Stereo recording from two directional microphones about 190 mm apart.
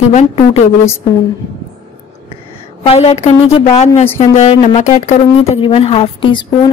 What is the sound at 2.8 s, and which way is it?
A man's voice, 30° left (ahead or behind).